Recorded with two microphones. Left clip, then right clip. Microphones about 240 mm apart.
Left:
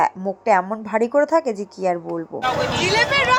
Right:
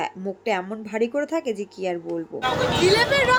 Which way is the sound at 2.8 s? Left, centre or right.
Centre.